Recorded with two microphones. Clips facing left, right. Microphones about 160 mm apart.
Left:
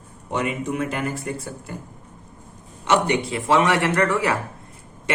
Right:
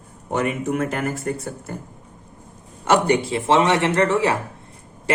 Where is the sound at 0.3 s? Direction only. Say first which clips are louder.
Right 3 dB; 50° right (ahead or behind).